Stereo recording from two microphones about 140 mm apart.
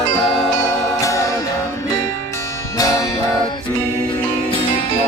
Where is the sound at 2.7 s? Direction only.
25° left (ahead or behind).